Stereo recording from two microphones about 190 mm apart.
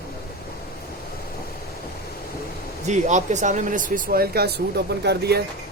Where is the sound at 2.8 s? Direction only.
40° right (ahead or behind); by 5.4 s 60° right (ahead or behind).